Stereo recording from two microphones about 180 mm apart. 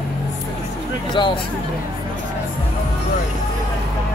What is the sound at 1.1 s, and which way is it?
Speech, 25° left (ahead or behind).